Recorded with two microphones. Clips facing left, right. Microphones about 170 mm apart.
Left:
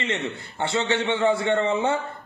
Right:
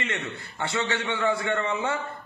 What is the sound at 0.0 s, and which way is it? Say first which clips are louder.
A man's voice: left 4 dB; 25° left (ahead or behind).